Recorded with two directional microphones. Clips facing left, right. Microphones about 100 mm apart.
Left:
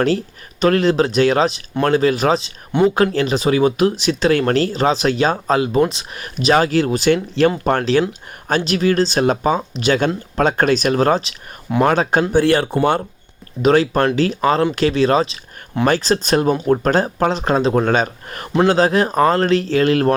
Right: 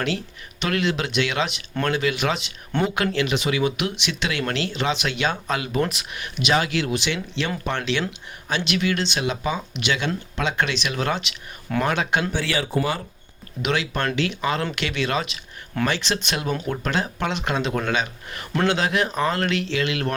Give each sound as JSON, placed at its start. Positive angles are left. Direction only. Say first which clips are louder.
{"t": 0.0, "sound": "speech", "louder": "left 9 dB", "side_deg": 40}
{"t": 12.3, "sound": "speech", "louder": "left 11 dB", "side_deg": 50}
{"t": 13.6, "sound": "speech", "louder": "left 10 dB", "side_deg": 40}